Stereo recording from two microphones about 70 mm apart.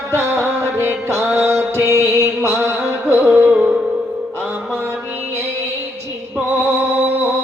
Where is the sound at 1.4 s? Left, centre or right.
Right.